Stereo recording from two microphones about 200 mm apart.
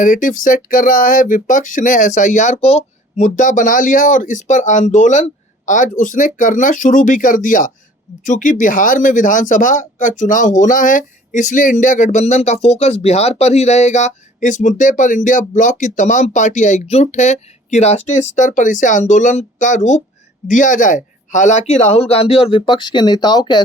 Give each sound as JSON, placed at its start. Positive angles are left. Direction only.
{"t": 0.0, "sound": "speech", "side_deg": 40}